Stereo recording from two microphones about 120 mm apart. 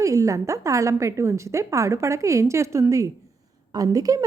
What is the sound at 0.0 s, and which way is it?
A woman's voice, 25° right (ahead or behind).